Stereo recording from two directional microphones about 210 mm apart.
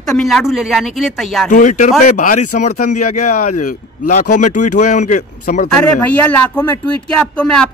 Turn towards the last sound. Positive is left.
turn(degrees=5)  # may be behind; listen again after turning